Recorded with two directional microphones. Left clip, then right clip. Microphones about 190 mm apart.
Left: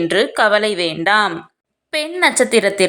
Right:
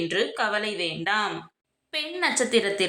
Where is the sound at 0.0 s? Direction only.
45° left (ahead or behind).